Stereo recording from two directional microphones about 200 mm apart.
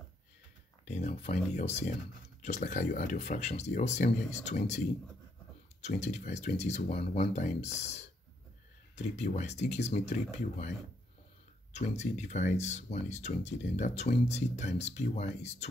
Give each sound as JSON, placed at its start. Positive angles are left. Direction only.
{"t": 0.8, "sound": "speech", "side_deg": 35}
{"t": 11.7, "sound": "speech", "side_deg": 35}